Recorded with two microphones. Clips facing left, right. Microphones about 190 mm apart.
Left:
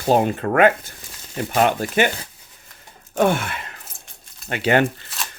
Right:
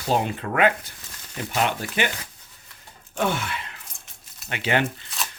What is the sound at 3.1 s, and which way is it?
Speech, 55° left (ahead or behind).